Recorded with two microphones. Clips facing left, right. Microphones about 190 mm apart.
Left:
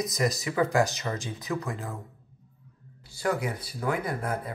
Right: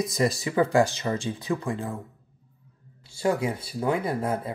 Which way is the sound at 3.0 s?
25° right (ahead or behind).